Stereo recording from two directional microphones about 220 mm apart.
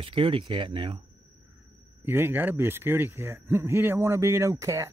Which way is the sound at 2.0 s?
10° right (ahead or behind).